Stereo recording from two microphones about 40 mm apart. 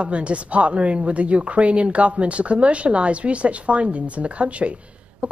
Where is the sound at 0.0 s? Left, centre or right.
Right.